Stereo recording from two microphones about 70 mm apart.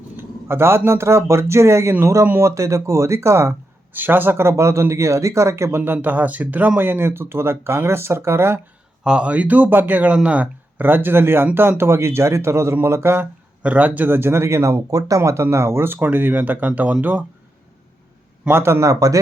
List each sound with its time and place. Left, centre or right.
0.2 s speech: right
3.9 s speech: right
9.0 s speech: centre; by 13.2 s right
13.6 s speech: right
14.8 s speech: right
18.4 s speech: right
18.9 s speech: right